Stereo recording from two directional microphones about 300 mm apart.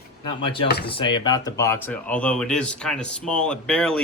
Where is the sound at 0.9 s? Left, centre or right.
Centre.